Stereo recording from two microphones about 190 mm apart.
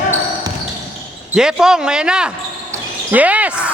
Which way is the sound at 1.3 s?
5° right (ahead or behind).